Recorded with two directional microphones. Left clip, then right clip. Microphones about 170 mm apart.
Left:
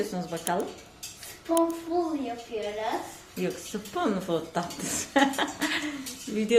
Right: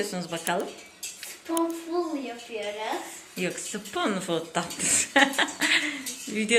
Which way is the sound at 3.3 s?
5° left (ahead or behind).